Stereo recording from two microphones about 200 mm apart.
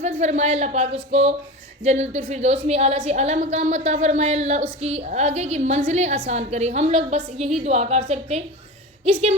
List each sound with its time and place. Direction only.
0.0 s a woman's voice: 35° right (ahead or behind)